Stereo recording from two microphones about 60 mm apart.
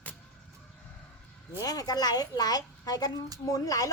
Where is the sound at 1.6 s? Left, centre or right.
Left.